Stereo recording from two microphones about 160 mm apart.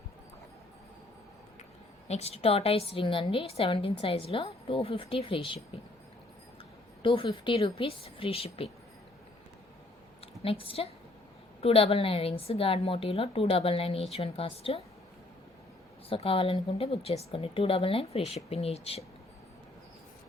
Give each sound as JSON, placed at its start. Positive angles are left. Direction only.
{"t": 2.0, "sound": "a woman's voice", "side_deg": 40}
{"t": 7.0, "sound": "a woman's voice", "side_deg": 30}
{"t": 10.4, "sound": "a woman's voice", "side_deg": 35}
{"t": 16.0, "sound": "a woman's voice", "side_deg": 35}